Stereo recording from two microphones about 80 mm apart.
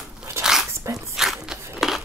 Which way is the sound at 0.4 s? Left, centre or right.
Centre.